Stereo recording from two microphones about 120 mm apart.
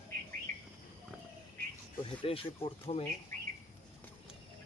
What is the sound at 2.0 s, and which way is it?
Speech, 50° left (ahead or behind).